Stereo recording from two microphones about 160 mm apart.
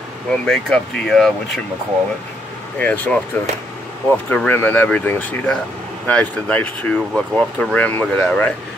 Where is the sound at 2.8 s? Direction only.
10° left (ahead or behind).